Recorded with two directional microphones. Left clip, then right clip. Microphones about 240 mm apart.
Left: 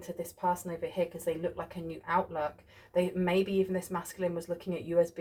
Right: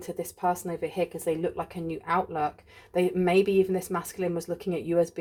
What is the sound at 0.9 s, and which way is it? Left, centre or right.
Speech, right.